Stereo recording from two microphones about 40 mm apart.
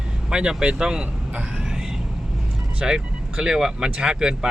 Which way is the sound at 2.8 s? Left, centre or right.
Centre.